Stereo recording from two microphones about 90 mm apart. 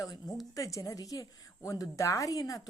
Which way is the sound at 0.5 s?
40° left (ahead or behind).